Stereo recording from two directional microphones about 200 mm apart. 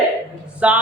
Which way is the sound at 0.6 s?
5° right (ahead or behind).